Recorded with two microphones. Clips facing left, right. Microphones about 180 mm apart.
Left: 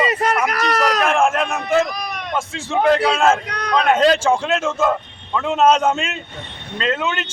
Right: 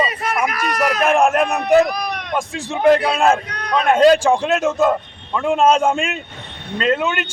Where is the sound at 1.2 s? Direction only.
40° right (ahead or behind).